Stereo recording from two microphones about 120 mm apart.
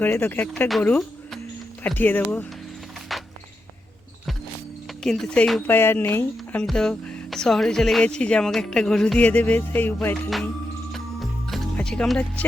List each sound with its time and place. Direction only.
0.0 s speech: 20° left (ahead or behind)
0.9 s music: 5° left (ahead or behind)
1.8 s speech: 15° left (ahead or behind)
3.1 s music: centre (ahead or behind)
5.0 s speech: 5° left (ahead or behind)
5.6 s speech: 20° left (ahead or behind)
10.9 s music: centre (ahead or behind)